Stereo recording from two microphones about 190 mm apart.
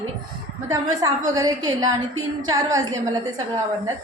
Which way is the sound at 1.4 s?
20° right (ahead or behind).